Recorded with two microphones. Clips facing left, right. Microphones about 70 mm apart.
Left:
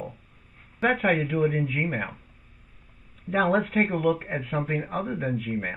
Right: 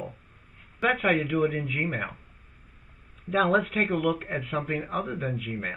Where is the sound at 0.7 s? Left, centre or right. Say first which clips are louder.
Left 1 dB; left.